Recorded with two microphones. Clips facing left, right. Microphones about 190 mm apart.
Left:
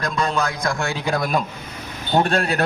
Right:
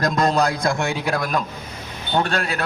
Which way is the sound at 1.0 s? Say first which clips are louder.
Left 1 dB; centre (ahead or behind).